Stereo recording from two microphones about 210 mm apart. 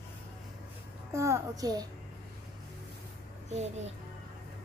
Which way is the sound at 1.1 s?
15° right (ahead or behind).